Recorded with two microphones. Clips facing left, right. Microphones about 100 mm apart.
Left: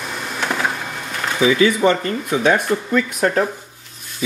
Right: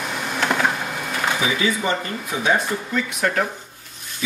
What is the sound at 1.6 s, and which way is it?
Speech, 60° left (ahead or behind).